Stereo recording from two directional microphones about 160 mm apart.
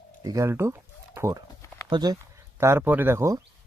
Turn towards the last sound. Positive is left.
turn(degrees=-15)  # may be behind; listen again after turning